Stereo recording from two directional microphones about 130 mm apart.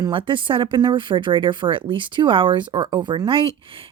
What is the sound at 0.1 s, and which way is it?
A woman's voice, 40° right (ahead or behind).